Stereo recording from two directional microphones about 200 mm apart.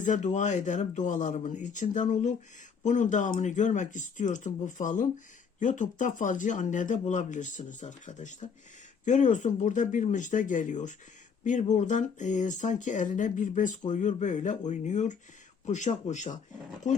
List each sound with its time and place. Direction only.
0.0 s speech: 35° left (ahead or behind)